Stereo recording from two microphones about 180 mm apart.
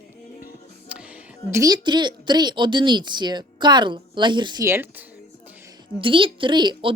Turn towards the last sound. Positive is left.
turn(degrees=-25)  # may be behind; listen again after turning